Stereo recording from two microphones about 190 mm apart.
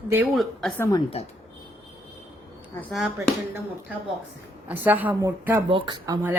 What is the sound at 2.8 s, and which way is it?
Speech, centre (ahead or behind).